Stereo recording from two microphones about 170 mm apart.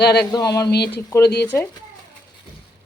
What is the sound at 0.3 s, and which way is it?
Speech, 20° left (ahead or behind).